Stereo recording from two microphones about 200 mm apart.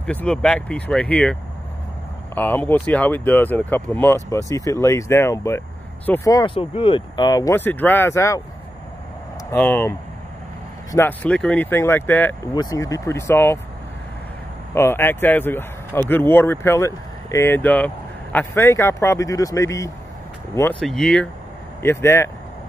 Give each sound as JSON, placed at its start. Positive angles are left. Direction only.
{"t": 0.0, "sound": "speech", "side_deg": 5}
{"t": 9.5, "sound": "speech", "side_deg": 10}
{"t": 14.7, "sound": "speech", "side_deg": 10}
{"t": 20.8, "sound": "speech", "side_deg": 0}